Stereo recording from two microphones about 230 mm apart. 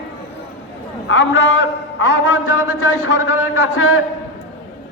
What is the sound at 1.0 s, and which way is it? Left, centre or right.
A man's voice, left.